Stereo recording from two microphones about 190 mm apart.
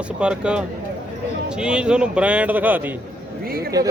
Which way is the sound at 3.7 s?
20° right (ahead or behind).